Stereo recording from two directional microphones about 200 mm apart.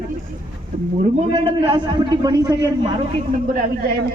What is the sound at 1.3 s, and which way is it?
Speech, 25° right (ahead or behind).